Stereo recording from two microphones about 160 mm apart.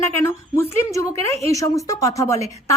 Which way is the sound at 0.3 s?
15° left (ahead or behind).